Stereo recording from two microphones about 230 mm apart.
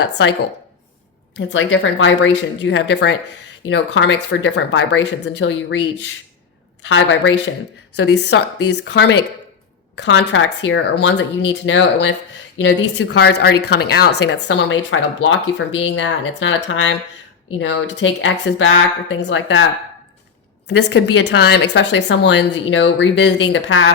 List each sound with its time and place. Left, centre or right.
0.0 s speech: left
1.4 s a woman's voice: left
20.7 s speech: left